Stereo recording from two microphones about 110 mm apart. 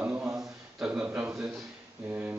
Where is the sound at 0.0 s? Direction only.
10° right (ahead or behind).